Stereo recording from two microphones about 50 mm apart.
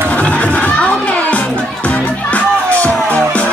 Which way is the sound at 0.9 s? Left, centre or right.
Left.